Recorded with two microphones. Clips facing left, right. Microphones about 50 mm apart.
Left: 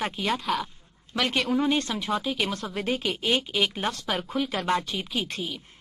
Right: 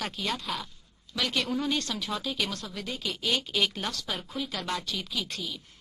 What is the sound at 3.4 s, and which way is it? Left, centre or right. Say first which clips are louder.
Speech: left 2 dB; centre.